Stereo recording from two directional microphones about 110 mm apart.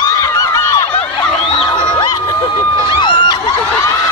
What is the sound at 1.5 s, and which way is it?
Crowd, 45° left (ahead or behind).